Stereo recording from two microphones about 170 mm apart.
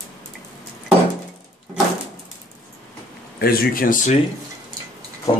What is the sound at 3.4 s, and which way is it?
Speech, 60° left (ahead or behind).